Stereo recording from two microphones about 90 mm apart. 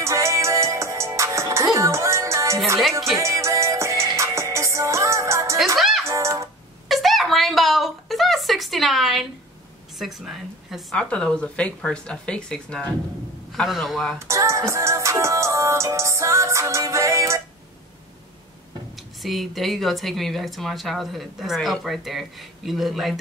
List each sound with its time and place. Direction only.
0.0 s music: 35° right (ahead or behind)
5.8 s music: centre (ahead or behind)
6.0 s music: 35° right (ahead or behind)
6.9 s a sound: centre (ahead or behind)
9.9 s a woman's voice: centre (ahead or behind)
11.0 s speech: 10° left (ahead or behind)
14.1 s music: 30° right (ahead or behind)
19.2 s speech: centre (ahead or behind)